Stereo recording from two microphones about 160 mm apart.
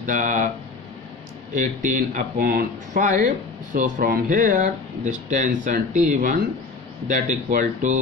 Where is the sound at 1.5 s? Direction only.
55° right (ahead or behind).